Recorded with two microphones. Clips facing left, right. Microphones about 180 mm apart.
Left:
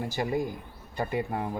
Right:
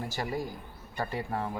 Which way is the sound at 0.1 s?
20° left (ahead or behind).